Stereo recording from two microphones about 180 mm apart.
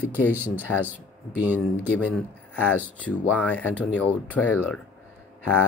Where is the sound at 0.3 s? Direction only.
10° right (ahead or behind).